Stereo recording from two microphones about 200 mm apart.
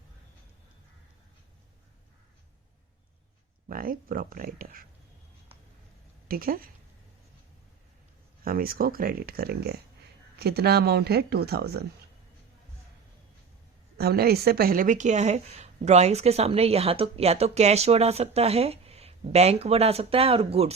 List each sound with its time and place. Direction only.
3.7 s speech: 45° right (ahead or behind)
6.2 s a woman's voice: 45° right (ahead or behind)
8.4 s speech: 45° right (ahead or behind)
13.9 s speech: 50° right (ahead or behind); by 20.7 s 30° right (ahead or behind)